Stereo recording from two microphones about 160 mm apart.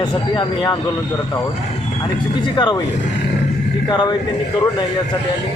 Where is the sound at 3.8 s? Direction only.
25° left (ahead or behind).